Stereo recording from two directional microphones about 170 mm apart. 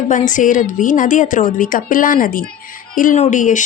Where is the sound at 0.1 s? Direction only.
50° left (ahead or behind).